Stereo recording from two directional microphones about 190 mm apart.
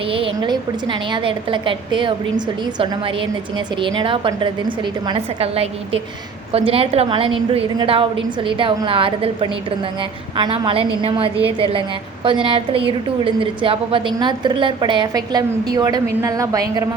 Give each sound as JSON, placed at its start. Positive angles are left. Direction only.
{"t": 0.4, "sound": "a woman's voice", "side_deg": -25}